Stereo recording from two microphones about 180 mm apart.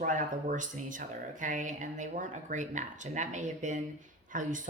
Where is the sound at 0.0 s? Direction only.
45° right (ahead or behind).